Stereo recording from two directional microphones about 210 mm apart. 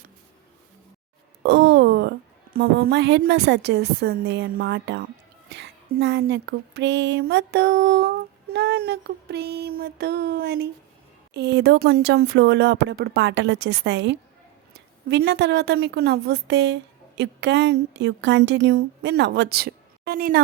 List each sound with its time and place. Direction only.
1.5 s a woman's voice: 60° right (ahead or behind)
8.5 s a sound: 50° right (ahead or behind)
11.3 s a woman's voice: 55° right (ahead or behind)